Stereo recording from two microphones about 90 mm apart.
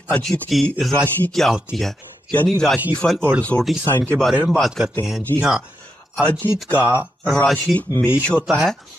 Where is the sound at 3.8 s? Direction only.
35° left (ahead or behind).